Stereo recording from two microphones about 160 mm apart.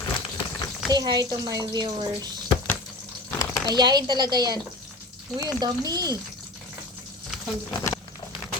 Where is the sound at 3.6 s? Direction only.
25° right (ahead or behind).